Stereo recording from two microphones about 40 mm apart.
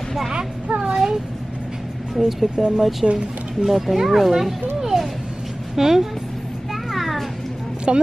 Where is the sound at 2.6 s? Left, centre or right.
Centre.